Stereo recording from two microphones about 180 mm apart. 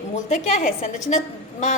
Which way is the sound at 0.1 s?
40° left (ahead or behind).